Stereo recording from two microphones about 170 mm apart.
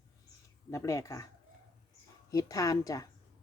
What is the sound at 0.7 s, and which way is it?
Speech, 15° left (ahead or behind).